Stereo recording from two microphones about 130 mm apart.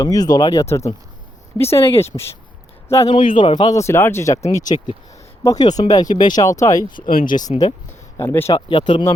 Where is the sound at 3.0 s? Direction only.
40° left (ahead or behind); by 4.4 s 20° left (ahead or behind).